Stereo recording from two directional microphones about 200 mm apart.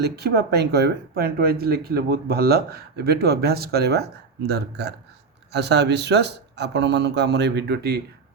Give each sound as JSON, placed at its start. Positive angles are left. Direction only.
{"t": 0.0, "sound": "speech", "side_deg": -55}